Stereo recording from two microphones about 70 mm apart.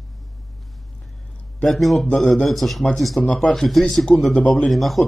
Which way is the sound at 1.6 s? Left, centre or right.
Centre.